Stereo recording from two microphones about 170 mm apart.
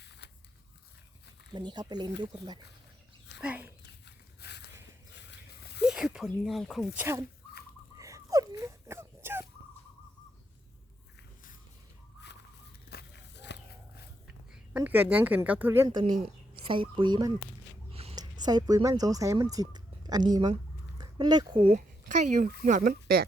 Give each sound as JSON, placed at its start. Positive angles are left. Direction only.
{"t": 1.5, "sound": "speech", "side_deg": -25}
{"t": 3.4, "sound": "dog", "side_deg": -10}
{"t": 4.0, "sound": "dog", "side_deg": 80}
{"t": 5.1, "sound": "a sound", "side_deg": 90}
{"t": 5.8, "sound": "speech", "side_deg": -5}
{"t": 6.9, "sound": "speech", "side_deg": -15}
{"t": 7.9, "sound": "wheeze", "side_deg": -20}
{"t": 12.9, "sound": "walk", "side_deg": 80}
{"t": 14.5, "sound": "speech", "side_deg": -10}
{"t": 15.9, "sound": "speech", "side_deg": -25}
{"t": 17.9, "sound": "a sound", "side_deg": -35}
{"t": 18.2, "sound": "speech", "side_deg": -25}
{"t": 21.8, "sound": "a woman's voice", "side_deg": -45}